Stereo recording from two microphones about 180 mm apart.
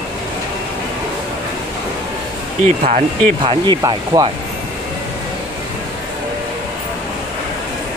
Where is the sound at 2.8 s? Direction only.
30° right (ahead or behind).